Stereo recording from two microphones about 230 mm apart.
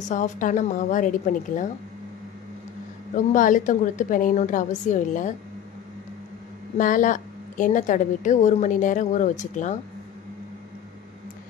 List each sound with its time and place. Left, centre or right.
0.0 s a woman's voice: left
3.3 s a woman's voice: left
6.8 s a woman's voice: left